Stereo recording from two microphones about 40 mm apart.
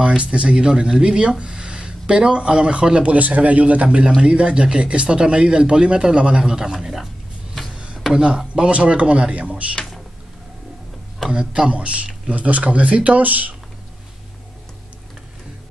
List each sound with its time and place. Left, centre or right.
0.0 s speech: right
0.7 s speech: centre
7.7 s a sound: right
8.1 s speech: right
8.7 s speech: right
11.2 s speech: right